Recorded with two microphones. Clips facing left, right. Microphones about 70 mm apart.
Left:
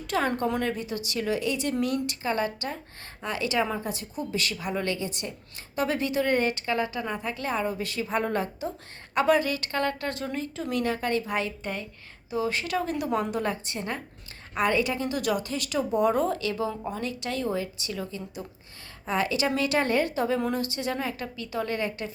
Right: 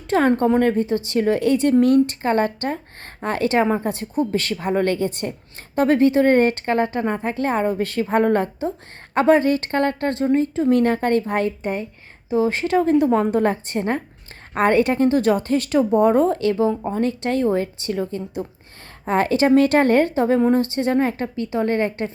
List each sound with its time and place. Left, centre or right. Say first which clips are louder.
0.1 s a woman's voice: right 10 dB; right
11.6 s a woman's voice: right 9 dB; right